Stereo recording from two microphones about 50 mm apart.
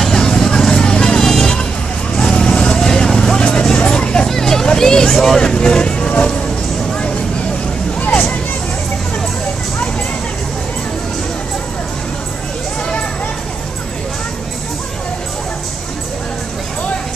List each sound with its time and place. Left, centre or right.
0.0 s vehicle: centre
3.6 s music: centre
4.3 s vehicle: centre